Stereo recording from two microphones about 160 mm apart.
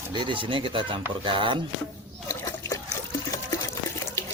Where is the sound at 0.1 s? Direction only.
30° right (ahead or behind).